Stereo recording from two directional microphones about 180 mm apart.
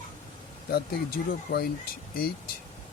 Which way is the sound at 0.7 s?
60° left (ahead or behind).